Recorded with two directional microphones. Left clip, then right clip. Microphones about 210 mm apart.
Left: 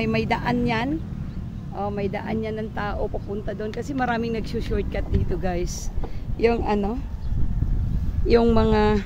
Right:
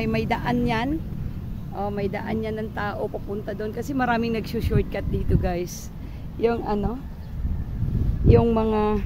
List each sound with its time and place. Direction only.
0.0 s speech: 10° left (ahead or behind); by 3.9 s 10° right (ahead or behind)
3.9 s speech: 30° right (ahead or behind); by 5.7 s 5° right (ahead or behind)
6.4 s speech: 10° left (ahead or behind)
8.3 s speech: 5° left (ahead or behind)